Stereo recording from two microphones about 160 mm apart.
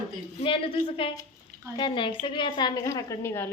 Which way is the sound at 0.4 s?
35° left (ahead or behind).